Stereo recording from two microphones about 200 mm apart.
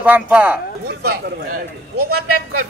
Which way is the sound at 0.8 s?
55° right (ahead or behind).